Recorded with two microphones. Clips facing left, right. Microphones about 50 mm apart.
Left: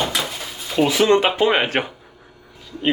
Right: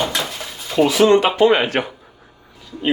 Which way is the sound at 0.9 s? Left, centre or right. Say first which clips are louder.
Right 2 dB; left.